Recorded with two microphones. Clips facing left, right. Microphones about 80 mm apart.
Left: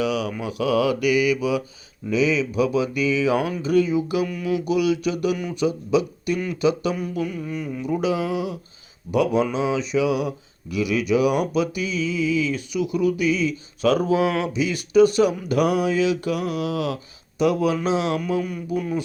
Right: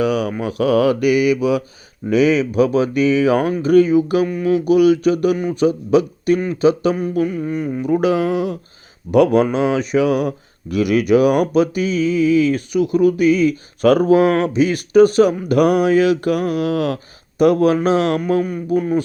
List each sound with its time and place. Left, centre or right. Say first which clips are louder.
0.0 s speech: right 6 dB; right